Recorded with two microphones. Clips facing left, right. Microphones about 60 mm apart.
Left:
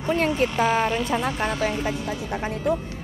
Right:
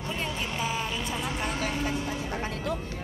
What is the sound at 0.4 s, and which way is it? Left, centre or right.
Speech, left.